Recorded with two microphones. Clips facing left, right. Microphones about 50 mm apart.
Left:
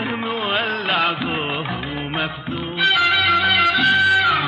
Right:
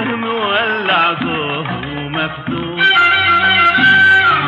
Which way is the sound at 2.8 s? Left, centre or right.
Right.